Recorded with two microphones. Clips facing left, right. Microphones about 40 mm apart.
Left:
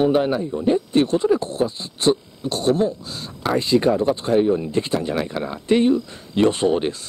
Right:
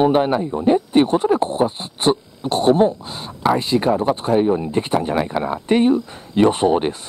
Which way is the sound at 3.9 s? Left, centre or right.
Centre.